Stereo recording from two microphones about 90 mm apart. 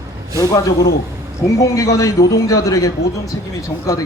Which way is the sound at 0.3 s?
40° left (ahead or behind).